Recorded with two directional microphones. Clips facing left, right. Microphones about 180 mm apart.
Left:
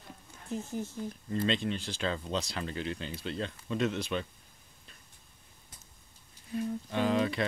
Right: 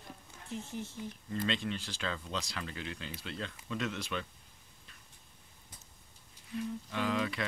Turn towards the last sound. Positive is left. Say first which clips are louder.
# left 5 dB
turn(degrees=30)  # may be behind; listen again after turning